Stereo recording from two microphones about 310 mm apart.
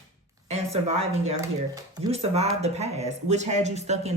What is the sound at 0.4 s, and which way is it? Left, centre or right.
A woman's voice, right.